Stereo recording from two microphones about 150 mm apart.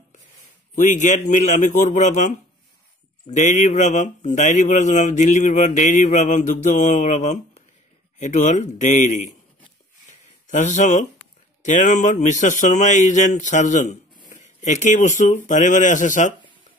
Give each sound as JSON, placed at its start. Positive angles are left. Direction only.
{"t": 0.7, "sound": "a man's voice", "side_deg": 55}
{"t": 3.3, "sound": "speech", "side_deg": 50}
{"t": 10.0, "sound": "a sound", "side_deg": 55}
{"t": 11.6, "sound": "speech", "side_deg": 55}